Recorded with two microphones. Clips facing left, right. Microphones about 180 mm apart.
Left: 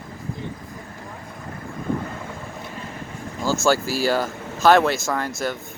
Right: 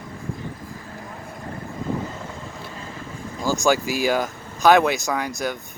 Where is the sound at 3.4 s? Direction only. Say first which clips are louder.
Even; 15° right (ahead or behind).